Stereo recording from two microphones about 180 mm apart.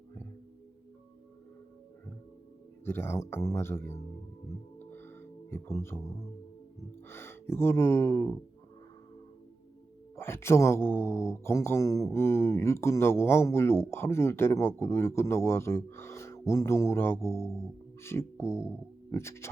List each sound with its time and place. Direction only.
2.8 s speech: 15° left (ahead or behind)
4.9 s music: 10° left (ahead or behind)
7.1 s speech: 15° left (ahead or behind)
10.2 s speech: 15° left (ahead or behind)